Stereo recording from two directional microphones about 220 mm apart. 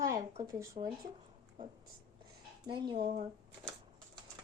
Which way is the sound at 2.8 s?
20° right (ahead or behind).